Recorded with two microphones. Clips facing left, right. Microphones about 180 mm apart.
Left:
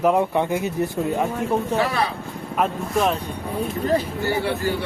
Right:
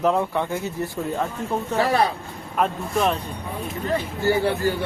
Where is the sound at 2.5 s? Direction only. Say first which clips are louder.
Left 1 dB; centre (ahead or behind).